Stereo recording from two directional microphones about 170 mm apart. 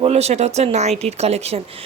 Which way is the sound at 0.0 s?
40° right (ahead or behind).